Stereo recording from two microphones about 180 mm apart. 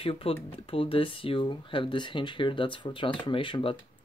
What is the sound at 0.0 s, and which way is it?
Speech, 30° left (ahead or behind).